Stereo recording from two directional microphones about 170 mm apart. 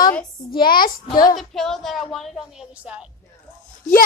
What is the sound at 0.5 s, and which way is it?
Speech, 60° left (ahead or behind).